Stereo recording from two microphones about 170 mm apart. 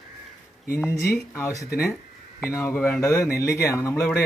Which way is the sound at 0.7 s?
15° left (ahead or behind).